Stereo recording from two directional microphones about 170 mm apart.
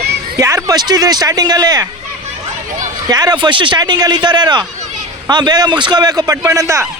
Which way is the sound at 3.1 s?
25° right (ahead or behind).